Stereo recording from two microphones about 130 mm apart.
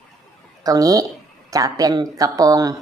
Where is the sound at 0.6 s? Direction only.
25° right (ahead or behind).